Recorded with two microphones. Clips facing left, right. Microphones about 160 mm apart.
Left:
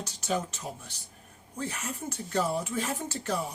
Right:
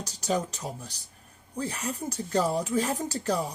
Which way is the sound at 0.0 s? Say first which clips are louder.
Right 3 dB; 40° right (ahead or behind).